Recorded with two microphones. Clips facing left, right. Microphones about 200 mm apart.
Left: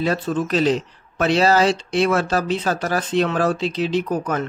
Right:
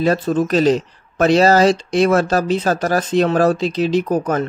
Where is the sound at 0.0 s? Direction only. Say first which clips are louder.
Right 5 dB; 40° right (ahead or behind).